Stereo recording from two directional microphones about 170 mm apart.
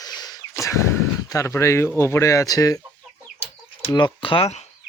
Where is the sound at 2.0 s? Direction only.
15° left (ahead or behind).